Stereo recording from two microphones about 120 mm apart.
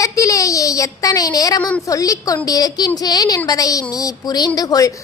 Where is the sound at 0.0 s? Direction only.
30° left (ahead or behind).